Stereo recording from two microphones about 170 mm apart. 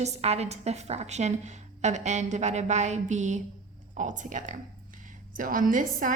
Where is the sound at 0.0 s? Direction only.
40° right (ahead or behind).